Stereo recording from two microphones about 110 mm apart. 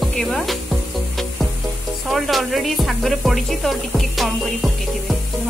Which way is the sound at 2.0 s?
Centre (ahead or behind).